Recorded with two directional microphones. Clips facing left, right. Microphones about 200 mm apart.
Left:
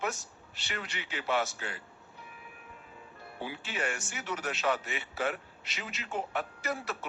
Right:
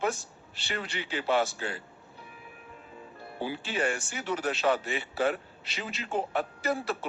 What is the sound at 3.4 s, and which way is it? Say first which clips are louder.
A man's voice: right 6 dB; 30° right (ahead or behind).